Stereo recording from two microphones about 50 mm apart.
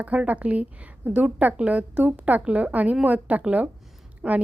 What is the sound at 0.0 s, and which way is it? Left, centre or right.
A woman's voice, right.